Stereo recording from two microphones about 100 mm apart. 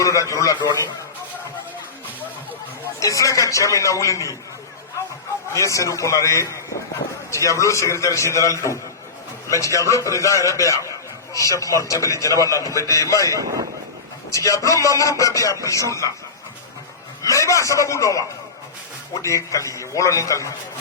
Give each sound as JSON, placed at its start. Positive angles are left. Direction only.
{"t": 0.0, "sound": "a man's voice", "side_deg": 30}
{"t": 3.0, "sound": "a man's voice", "side_deg": 35}
{"t": 5.5, "sound": "a man's voice", "side_deg": 30}
{"t": 13.4, "sound": "speech", "side_deg": -35}
{"t": 14.3, "sound": "a man's voice", "side_deg": 30}
{"t": 17.2, "sound": "a man's voice", "side_deg": 30}